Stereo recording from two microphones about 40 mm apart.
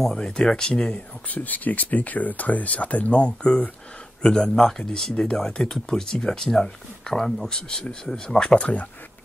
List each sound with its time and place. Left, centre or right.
0.0 s speech: centre
0.4 s speech: left
1.3 s speech: left; by 8.5 s centre
8.5 s speech: left